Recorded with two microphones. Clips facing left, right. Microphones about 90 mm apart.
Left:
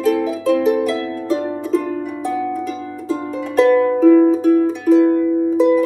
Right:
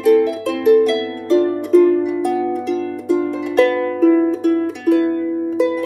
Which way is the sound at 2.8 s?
15° left (ahead or behind).